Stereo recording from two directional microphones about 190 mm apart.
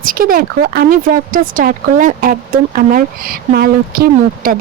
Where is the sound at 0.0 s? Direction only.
50° right (ahead or behind).